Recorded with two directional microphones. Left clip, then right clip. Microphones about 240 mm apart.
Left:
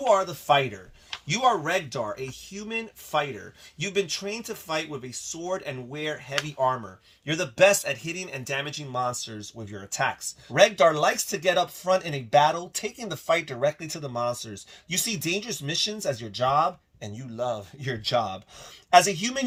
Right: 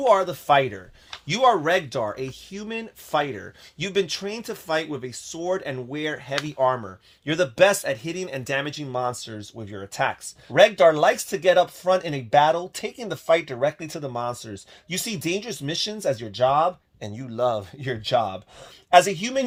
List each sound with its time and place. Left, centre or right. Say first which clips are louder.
0.1 s speech: right 2 dB; right